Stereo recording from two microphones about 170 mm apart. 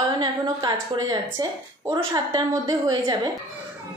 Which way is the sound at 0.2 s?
25° right (ahead or behind).